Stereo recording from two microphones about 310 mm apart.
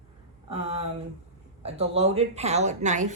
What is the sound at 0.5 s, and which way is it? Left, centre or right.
A woman's voice, centre.